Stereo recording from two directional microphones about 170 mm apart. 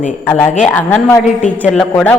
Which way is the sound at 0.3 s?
10° left (ahead or behind).